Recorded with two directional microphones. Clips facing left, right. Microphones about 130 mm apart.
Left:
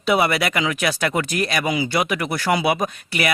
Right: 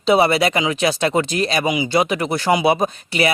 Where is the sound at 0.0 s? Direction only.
25° right (ahead or behind).